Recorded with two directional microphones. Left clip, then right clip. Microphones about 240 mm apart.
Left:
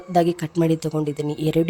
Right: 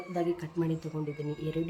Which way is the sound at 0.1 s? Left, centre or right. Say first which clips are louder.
Left 13 dB; left.